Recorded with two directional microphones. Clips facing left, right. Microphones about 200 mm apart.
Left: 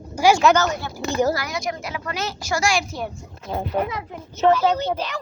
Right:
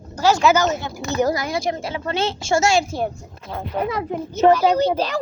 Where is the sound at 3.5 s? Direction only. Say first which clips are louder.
Left 3 dB; 15° left (ahead or behind).